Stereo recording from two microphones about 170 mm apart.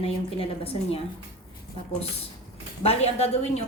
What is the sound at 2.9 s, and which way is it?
Speech, 40° left (ahead or behind).